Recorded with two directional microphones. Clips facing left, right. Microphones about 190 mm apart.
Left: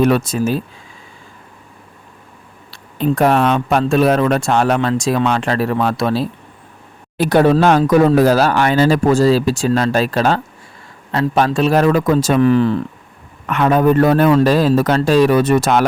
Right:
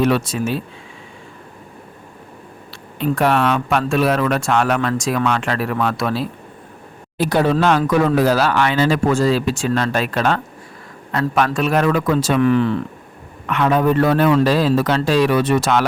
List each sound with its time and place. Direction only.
0.0 s a man's voice: 45° left (ahead or behind)
3.0 s speech: 40° left (ahead or behind)
7.2 s a man's voice: 55° left (ahead or behind)